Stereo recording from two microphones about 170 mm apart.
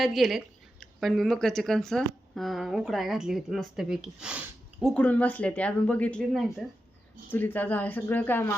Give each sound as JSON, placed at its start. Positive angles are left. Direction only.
{"t": 0.0, "sound": "a woman's voice", "side_deg": 0}
{"t": 7.3, "sound": "speech", "side_deg": 10}